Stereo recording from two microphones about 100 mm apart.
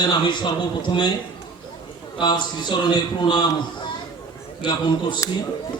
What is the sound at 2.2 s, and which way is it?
A man's voice, 50° left (ahead or behind).